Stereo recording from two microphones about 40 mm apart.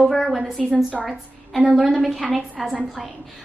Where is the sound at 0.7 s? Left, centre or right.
Right.